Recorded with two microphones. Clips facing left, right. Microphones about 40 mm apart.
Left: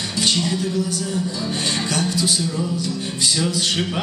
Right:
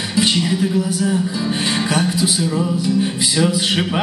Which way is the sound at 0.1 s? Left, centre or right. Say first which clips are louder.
Right 4 dB; centre.